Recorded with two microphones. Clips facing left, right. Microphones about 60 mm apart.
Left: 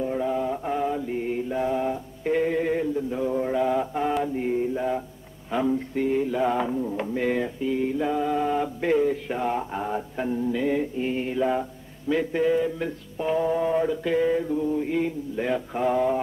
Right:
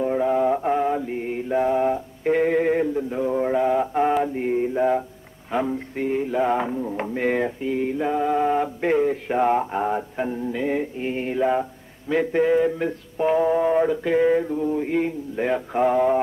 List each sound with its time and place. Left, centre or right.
0.0 s mantra: right
2.2 s mantra: right
4.2 s mantra: right
6.2 s mantra: right
6.7 s a sound: centre
7.0 s mantra: right
12.1 s mantra: right
14.8 s mantra: right